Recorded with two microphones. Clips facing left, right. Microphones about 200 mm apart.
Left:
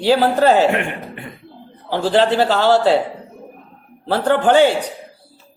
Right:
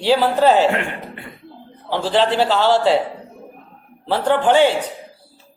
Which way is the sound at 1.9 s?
50° left (ahead or behind).